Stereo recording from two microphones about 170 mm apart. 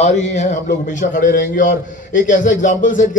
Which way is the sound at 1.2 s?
50° left (ahead or behind).